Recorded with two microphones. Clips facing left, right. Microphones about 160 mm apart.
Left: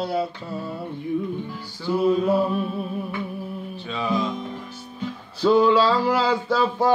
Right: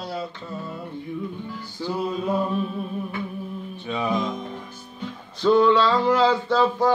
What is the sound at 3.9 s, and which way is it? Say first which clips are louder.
Music: even; 20° right (ahead or behind).